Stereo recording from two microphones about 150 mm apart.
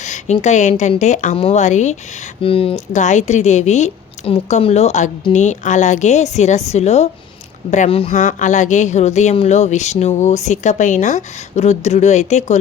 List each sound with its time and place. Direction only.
0.0 s a woman's voice: 50° left (ahead or behind)
2.4 s speech: 40° left (ahead or behind)
2.9 s speech: 55° left (ahead or behind)
8.1 s speech: 55° left (ahead or behind)